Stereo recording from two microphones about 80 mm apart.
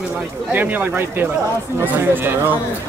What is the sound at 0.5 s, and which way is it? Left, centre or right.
Speech, right.